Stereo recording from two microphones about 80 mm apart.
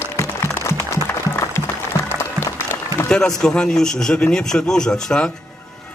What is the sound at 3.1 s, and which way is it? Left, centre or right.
A man's voice, centre.